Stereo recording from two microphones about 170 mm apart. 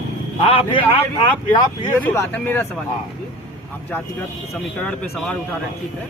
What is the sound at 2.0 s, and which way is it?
Speech, 10° left (ahead or behind).